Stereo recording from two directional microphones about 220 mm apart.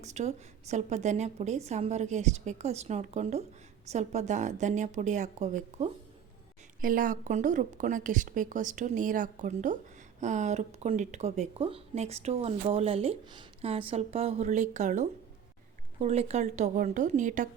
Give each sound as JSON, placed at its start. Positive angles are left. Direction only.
{"t": 0.0, "sound": "a woman's voice", "side_deg": -30}